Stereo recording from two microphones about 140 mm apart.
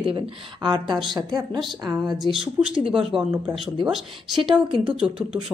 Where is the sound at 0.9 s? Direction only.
Centre (ahead or behind).